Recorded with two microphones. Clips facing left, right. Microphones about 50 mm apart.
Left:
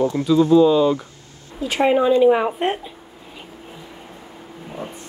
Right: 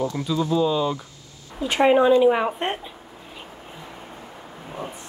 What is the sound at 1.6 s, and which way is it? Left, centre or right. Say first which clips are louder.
A woman's voice: even; centre.